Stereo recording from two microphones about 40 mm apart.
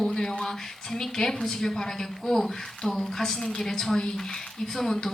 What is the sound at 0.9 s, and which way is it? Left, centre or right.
A man's voice, centre.